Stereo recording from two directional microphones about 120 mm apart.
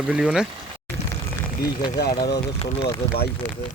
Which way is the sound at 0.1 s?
5° right (ahead or behind).